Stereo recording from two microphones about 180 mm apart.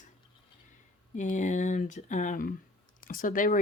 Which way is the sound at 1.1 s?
45° left (ahead or behind).